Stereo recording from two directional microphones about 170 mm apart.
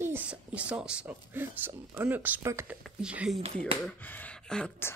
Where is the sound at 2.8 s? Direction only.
5° right (ahead or behind).